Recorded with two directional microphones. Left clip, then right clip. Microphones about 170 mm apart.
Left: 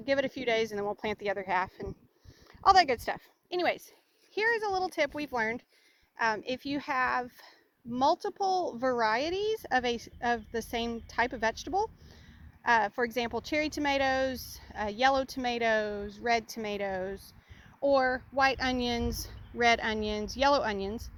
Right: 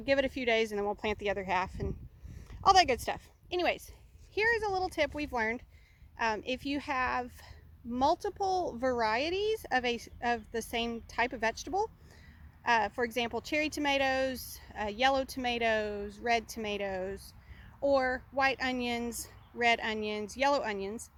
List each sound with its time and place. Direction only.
0.0 s a woman's voice: 20° right (ahead or behind)